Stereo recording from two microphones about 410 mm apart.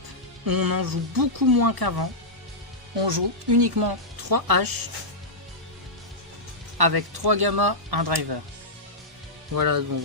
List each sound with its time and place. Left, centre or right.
0.4 s speech: right
2.9 s speech: right
6.7 s speech: right
9.6 s speech: right